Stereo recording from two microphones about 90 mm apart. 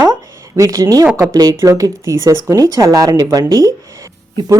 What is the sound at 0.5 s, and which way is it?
Speech, 40° right (ahead or behind).